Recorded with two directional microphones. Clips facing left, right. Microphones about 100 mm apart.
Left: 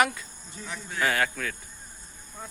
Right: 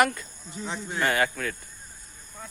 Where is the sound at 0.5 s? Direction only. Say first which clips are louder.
Right 5 dB; 25° right (ahead or behind).